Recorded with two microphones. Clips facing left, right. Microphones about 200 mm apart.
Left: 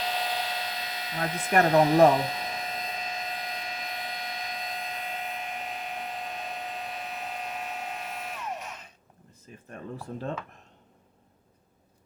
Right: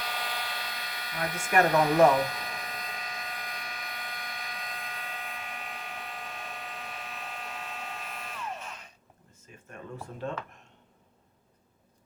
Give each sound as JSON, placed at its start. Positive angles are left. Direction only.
{"t": 0.0, "sound": "hair dryer", "side_deg": 20}
{"t": 1.6, "sound": "speech", "side_deg": 20}
{"t": 2.1, "sound": "hum", "side_deg": 20}
{"t": 9.6, "sound": "speech", "side_deg": 35}